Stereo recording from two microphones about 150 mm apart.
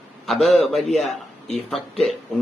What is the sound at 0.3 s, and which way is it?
Speech, centre (ahead or behind).